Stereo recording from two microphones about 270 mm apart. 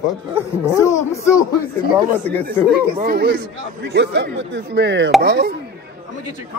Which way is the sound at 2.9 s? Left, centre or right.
Right.